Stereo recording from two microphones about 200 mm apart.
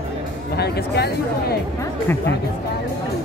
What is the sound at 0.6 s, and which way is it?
Speech, 55° left (ahead or behind).